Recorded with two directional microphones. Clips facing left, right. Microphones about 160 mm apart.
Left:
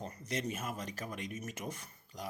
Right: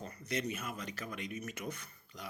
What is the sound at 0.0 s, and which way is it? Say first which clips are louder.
Speech: even; 40° left (ahead or behind).